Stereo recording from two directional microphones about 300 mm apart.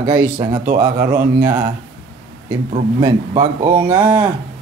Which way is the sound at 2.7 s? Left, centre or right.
Centre.